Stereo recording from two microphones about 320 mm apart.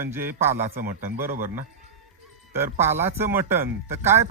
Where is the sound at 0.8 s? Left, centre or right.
Right.